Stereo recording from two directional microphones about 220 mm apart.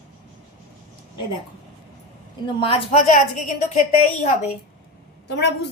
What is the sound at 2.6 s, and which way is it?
Speech, 25° left (ahead or behind).